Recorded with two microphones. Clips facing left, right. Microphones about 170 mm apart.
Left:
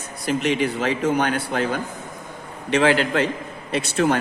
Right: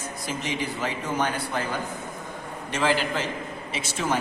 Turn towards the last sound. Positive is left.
turn(degrees=65)  # may be behind; listen again after turning